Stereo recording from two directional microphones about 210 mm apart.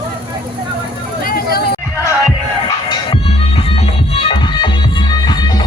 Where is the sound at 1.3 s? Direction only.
45° left (ahead or behind).